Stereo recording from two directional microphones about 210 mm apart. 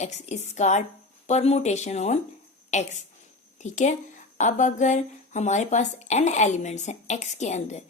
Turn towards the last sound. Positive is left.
turn(degrees=35)  # may be behind; listen again after turning